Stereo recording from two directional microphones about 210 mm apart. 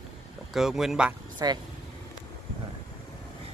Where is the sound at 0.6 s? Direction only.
Centre (ahead or behind).